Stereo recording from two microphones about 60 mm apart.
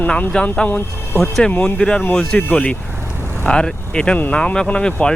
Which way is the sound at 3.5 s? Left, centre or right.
Centre.